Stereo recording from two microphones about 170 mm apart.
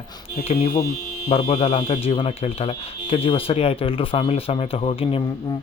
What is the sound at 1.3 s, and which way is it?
Speech, 35° left (ahead or behind).